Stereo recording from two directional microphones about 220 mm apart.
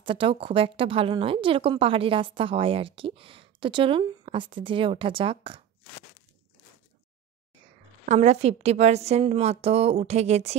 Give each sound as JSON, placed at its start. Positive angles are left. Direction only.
{"t": 0.0, "sound": "a woman's voice", "side_deg": -25}
{"t": 8.0, "sound": "a woman's voice", "side_deg": -30}